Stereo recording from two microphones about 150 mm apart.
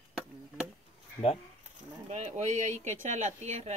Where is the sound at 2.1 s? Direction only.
50° right (ahead or behind).